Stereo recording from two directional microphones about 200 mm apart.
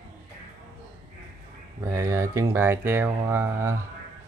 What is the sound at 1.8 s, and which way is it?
Speech, 15° right (ahead or behind).